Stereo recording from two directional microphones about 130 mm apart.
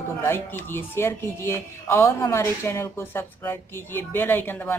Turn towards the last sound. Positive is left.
turn(degrees=15)  # may be behind; listen again after turning